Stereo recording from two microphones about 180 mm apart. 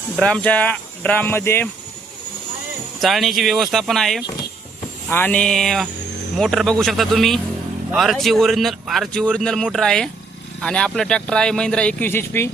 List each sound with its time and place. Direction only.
0.2 s speech: 5° left (ahead or behind)
3.0 s speech: centre (ahead or behind)